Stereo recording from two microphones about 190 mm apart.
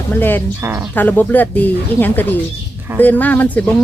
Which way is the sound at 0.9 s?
10° left (ahead or behind).